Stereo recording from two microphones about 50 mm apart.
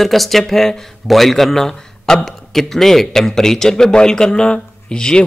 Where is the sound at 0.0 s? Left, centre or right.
Centre.